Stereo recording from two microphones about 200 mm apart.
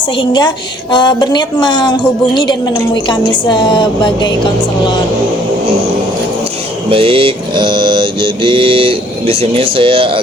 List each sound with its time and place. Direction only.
0.2 s speech: 20° left (ahead or behind)
6.9 s mantra: 25° right (ahead or behind)
9.7 s speech: 25° right (ahead or behind)